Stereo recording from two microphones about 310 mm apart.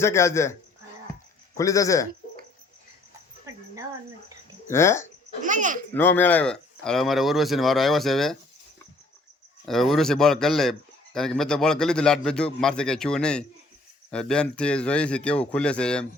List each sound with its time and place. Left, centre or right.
0.0 s a man's voice: centre
1.5 s a man's voice: centre
4.7 s a man's voice: centre
5.4 s a child's voice: right
5.9 s speech: centre
9.6 s speech: centre